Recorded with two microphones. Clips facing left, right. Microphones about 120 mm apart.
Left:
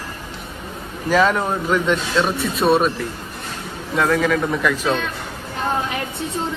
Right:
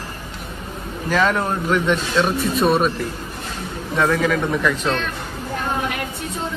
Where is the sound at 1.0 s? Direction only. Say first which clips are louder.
Left 2 dB; 5° left (ahead or behind).